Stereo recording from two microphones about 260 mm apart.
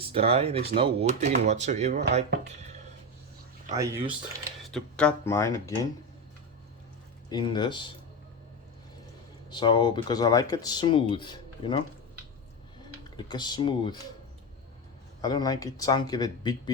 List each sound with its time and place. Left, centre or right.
0.0 s speech: right
3.8 s speech: centre
4.7 s speech: centre
7.3 s speech: centre
9.5 s speech: centre
13.1 s speech: centre
15.2 s speech: centre